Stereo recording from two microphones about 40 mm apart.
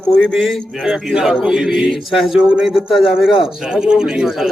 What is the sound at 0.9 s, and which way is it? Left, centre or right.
A man's voice, centre.